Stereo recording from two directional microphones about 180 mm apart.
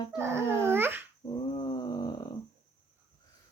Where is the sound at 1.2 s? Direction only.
25° left (ahead or behind).